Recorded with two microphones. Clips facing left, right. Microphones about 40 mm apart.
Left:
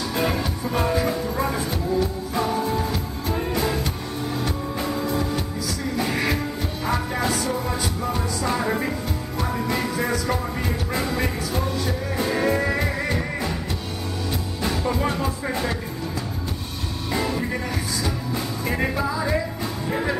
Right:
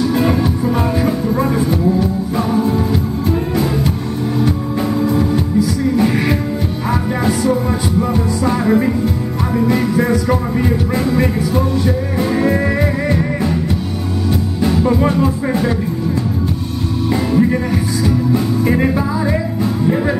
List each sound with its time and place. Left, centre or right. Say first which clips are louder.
0.0 s music: right 9 dB; centre
14.6 s music: right 9 dB; centre
17.1 s music: right 10 dB; centre